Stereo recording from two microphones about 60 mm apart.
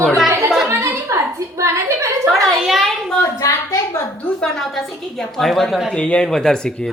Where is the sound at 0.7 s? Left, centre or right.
Right.